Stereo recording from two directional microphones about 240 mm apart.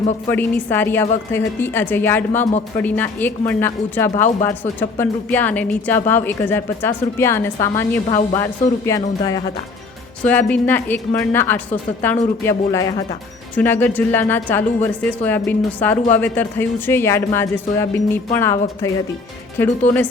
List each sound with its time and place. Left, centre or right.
0.3 s a woman's voice: centre
2.4 s speech: left
2.7 s a woman's voice: centre